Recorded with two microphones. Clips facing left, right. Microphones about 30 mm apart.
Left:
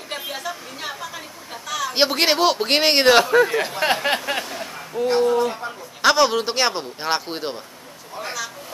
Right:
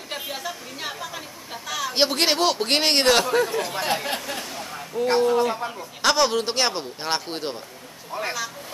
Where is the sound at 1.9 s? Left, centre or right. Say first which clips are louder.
Left 2 dB; centre.